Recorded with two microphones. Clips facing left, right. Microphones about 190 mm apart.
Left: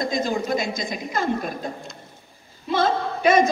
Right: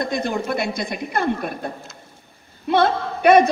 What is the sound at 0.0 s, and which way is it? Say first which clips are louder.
A woman's voice: right 1 dB; 65° right (ahead or behind).